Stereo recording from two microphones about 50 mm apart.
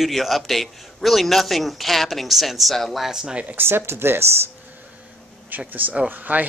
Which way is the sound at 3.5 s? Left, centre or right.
Right.